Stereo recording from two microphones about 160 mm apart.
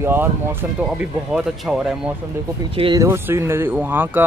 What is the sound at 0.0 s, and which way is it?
Speech, 15° right (ahead or behind).